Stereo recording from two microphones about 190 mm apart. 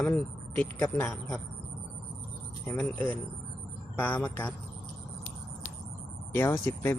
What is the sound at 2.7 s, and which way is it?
Speech, 10° left (ahead or behind).